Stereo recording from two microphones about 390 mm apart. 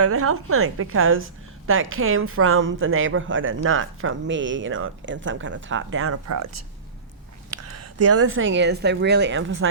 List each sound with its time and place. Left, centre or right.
0.0 s speech: right
7.5 s speech: right